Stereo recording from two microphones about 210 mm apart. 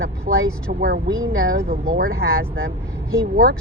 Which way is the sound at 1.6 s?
45° right (ahead or behind).